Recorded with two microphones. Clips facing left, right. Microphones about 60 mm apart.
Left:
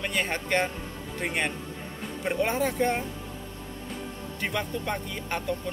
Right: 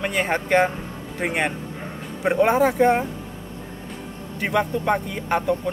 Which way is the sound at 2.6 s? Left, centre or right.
Centre.